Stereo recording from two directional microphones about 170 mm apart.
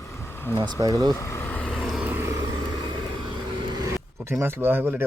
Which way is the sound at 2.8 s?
30° right (ahead or behind).